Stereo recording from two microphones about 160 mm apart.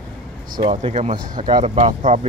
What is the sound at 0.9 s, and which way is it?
Speech, 50° right (ahead or behind).